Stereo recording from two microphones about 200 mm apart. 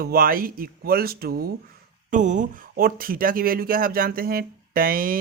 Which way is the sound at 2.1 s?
40° right (ahead or behind).